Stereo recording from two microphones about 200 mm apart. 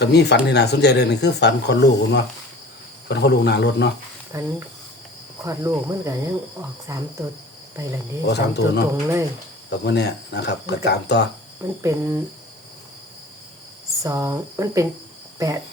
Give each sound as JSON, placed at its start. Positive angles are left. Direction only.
{"t": 0.0, "sound": "speech", "side_deg": 55}
{"t": 4.3, "sound": "speech", "side_deg": -15}
{"t": 8.3, "sound": "speech", "side_deg": 55}
{"t": 8.9, "sound": "speech", "side_deg": -15}
{"t": 9.6, "sound": "speech", "side_deg": 55}
{"t": 11.8, "sound": "speech", "side_deg": -15}
{"t": 14.0, "sound": "speech", "side_deg": -15}